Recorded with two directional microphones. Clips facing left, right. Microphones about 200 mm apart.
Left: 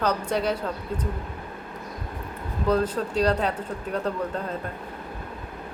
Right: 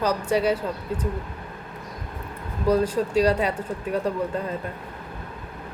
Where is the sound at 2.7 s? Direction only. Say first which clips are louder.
Right 3 dB; 10° right (ahead or behind).